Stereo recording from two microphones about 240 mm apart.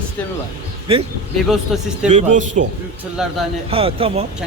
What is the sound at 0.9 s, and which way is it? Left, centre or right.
Speech, right.